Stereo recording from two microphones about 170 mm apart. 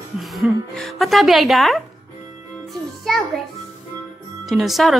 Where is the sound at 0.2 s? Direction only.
Centre (ahead or behind).